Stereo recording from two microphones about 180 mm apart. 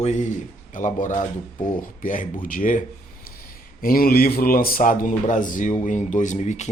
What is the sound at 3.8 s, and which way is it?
A man's voice, 55° left (ahead or behind).